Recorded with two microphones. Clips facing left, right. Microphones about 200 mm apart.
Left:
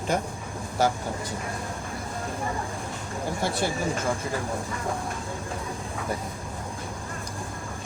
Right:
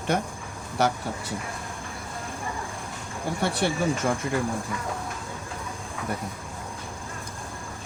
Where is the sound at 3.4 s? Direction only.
70° right (ahead or behind).